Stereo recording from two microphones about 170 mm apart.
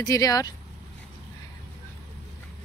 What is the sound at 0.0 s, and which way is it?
Speech, 20° left (ahead or behind).